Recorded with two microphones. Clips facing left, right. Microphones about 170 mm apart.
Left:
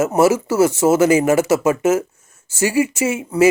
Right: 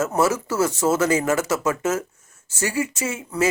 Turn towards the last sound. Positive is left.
turn(degrees=25)  # may be behind; listen again after turning